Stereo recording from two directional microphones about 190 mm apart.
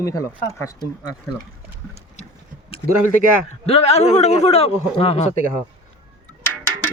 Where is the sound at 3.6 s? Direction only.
35° left (ahead or behind).